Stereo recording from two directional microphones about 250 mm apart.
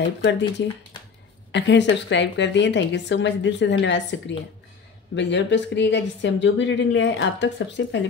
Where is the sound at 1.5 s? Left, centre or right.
Left.